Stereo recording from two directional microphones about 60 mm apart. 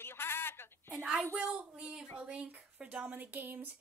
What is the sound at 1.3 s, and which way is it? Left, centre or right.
Speech, right.